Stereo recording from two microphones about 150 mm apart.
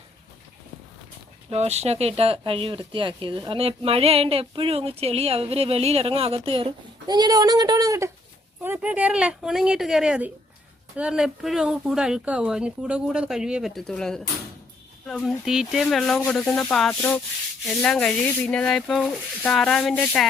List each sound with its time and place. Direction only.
1.5 s speech: 45° right (ahead or behind); by 20.2 s 5° left (ahead or behind)